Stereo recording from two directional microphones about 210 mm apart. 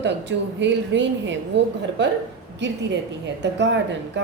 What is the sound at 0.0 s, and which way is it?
Speech, 55° right (ahead or behind).